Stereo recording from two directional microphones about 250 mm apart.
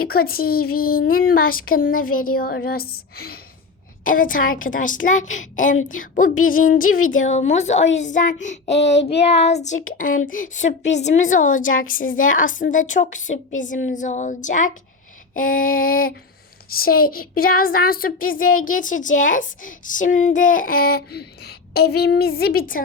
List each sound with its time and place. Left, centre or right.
0.1 s child singing: left
7.2 s speech: left
10.9 s child singing: left
11.7 s a woman's voice: left
12.4 s child singing: left